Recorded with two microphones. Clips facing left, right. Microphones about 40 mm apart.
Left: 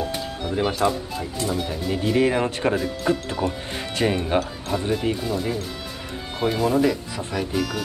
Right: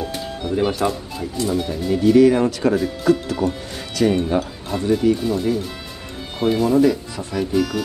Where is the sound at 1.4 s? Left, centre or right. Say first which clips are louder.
Right 5 dB; centre.